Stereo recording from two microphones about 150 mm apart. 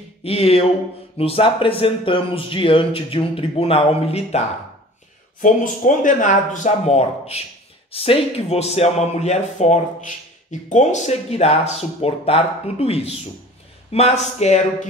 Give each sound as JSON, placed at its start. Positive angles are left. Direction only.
{"t": 0.2, "sound": "speech", "side_deg": 40}
{"t": 5.4, "sound": "speech", "side_deg": 60}